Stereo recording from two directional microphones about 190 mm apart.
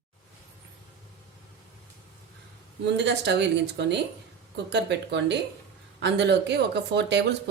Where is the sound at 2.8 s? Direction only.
65° right (ahead or behind).